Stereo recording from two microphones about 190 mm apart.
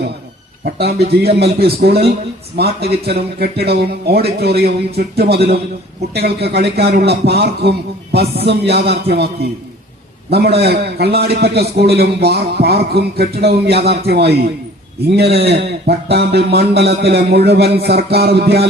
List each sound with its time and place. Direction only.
0.6 s a man's voice: 55° right (ahead or behind)